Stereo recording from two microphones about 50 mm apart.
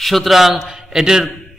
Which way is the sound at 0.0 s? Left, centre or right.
Centre.